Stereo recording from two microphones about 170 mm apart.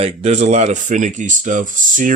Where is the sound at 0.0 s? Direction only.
40° right (ahead or behind).